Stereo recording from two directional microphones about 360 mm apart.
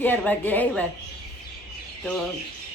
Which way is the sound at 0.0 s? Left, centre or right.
Centre.